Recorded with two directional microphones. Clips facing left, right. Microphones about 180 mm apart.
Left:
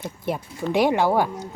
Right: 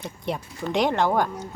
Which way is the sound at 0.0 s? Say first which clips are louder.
Left 2 dB; 5° left (ahead or behind).